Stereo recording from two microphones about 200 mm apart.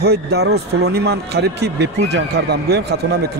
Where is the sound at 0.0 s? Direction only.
55° right (ahead or behind).